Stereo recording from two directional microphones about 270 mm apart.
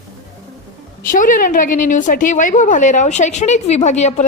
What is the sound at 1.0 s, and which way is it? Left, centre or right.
A woman's voice, left.